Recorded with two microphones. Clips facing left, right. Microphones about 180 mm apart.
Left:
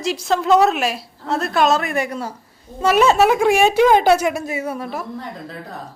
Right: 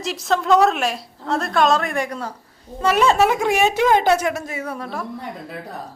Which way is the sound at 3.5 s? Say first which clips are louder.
Left 3 dB; 20° right (ahead or behind).